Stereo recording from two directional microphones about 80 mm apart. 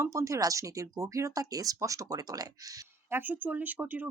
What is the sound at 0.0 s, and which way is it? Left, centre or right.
Speech, right.